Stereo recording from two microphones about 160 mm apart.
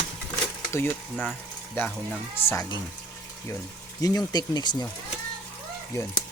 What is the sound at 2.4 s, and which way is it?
Speech, 15° left (ahead or behind).